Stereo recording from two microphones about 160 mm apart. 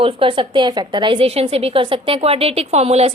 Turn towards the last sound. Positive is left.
turn(degrees=-40)  # may be behind; listen again after turning